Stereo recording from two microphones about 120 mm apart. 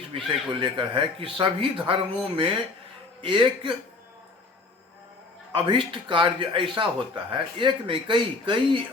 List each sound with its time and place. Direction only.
0.1 s speech: 45° right (ahead or behind)
5.6 s speech: 45° right (ahead or behind)